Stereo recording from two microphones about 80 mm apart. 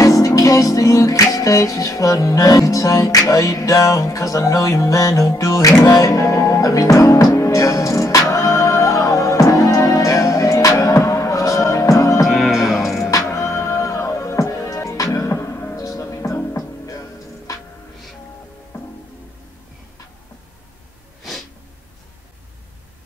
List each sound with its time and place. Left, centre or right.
0.0 s music: left
12.3 s music: centre
13.0 s music: left